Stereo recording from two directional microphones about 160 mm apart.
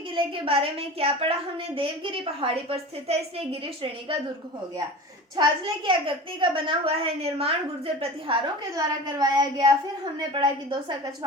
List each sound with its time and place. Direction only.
0.4 s a woman's voice: 35° right (ahead or behind)
5.4 s a woman's voice: 30° right (ahead or behind)
8.7 s a woman's voice: 25° right (ahead or behind)